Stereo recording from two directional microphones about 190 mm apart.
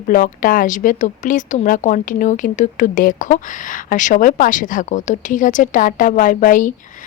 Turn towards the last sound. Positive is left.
turn(degrees=45)  # may be behind; listen again after turning